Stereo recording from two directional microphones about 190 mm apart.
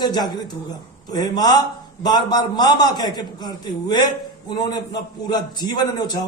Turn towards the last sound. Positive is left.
turn(degrees=20)  # may be behind; listen again after turning